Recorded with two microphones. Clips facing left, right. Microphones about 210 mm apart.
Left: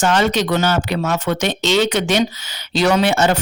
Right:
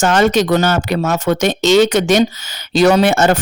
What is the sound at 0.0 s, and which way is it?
Speech, 45° right (ahead or behind).